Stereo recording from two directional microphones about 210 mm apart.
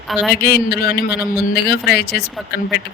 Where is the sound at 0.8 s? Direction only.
50° left (ahead or behind).